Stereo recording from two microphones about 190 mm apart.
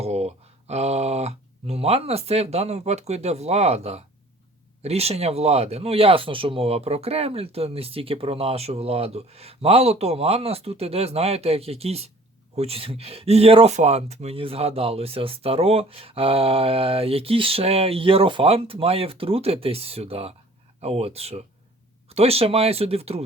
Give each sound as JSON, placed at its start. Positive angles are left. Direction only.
{"t": 0.0, "sound": "speech", "side_deg": -35}